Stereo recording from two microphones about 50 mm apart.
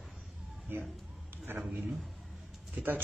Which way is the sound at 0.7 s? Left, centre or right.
Right.